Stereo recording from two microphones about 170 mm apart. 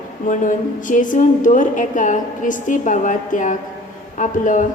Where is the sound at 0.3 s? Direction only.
50° left (ahead or behind).